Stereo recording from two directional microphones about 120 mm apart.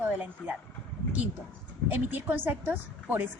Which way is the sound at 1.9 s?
15° right (ahead or behind).